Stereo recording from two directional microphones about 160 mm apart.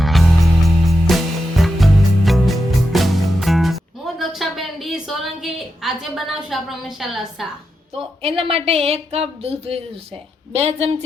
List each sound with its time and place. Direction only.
0.0 s music: centre (ahead or behind)
8.2 s speech: 35° right (ahead or behind)